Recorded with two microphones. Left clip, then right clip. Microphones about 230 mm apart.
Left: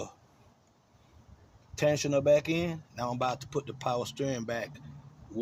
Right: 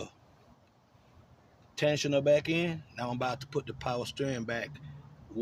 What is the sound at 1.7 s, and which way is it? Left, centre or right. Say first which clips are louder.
Speech: left 1 dB; centre.